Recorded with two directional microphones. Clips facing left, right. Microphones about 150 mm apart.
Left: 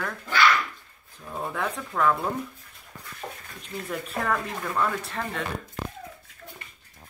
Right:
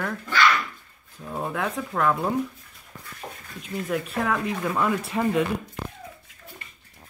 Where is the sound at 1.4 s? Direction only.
5° right (ahead or behind).